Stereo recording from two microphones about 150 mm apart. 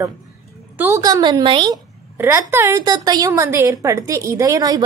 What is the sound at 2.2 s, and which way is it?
A woman's voice, 20° right (ahead or behind).